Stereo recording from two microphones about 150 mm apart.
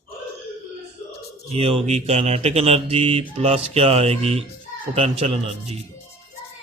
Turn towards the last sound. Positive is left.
turn(degrees=-40)  # may be behind; listen again after turning